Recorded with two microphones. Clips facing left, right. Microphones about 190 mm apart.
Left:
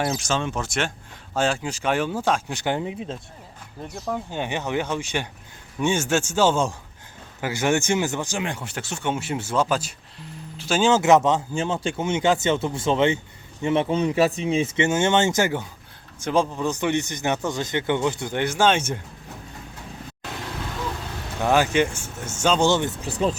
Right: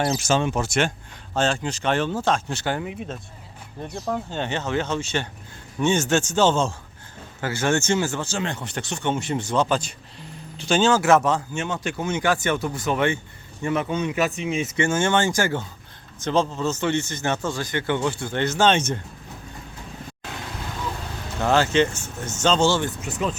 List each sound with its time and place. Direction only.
0.0 s a man's voice: 5° right (ahead or behind); by 3.2 s 25° left (ahead or behind)
3.8 s speech: centre (ahead or behind)
4.3 s a man's voice: 15° left (ahead or behind)
10.9 s a man's voice: 20° left (ahead or behind)
21.4 s a man's voice: 15° left (ahead or behind)
23.0 s speech: 30° left (ahead or behind)